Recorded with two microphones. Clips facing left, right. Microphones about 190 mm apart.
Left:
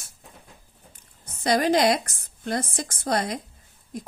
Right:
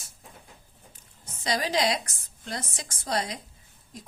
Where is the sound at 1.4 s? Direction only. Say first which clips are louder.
Left 6 dB; 55° left (ahead or behind).